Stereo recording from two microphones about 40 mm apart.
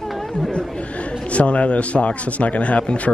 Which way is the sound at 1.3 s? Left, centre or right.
Left.